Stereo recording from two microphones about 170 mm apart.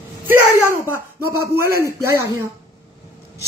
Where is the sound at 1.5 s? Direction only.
15° right (ahead or behind).